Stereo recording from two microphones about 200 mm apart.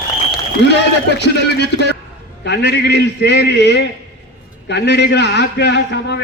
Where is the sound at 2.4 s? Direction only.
60° left (ahead or behind).